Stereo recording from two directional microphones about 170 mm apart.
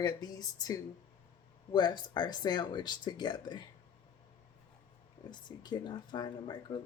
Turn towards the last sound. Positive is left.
turn(degrees=25)  # may be behind; listen again after turning